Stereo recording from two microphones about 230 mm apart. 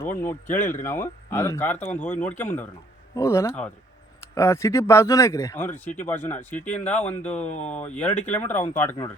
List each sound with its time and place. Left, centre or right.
0.0 s speech: centre